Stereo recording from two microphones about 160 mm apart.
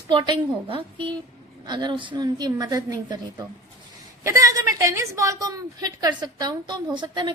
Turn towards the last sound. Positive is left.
turn(degrees=-30)  # may be behind; listen again after turning